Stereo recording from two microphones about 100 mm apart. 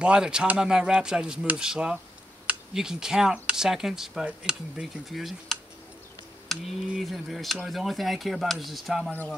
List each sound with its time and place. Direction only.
0.0 s speech: 10° right (ahead or behind)